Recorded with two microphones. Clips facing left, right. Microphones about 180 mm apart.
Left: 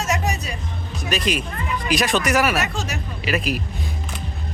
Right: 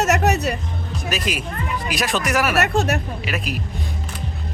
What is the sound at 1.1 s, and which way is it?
Speech, 5° right (ahead or behind).